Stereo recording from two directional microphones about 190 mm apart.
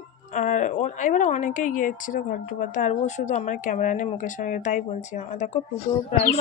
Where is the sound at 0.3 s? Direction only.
40° left (ahead or behind).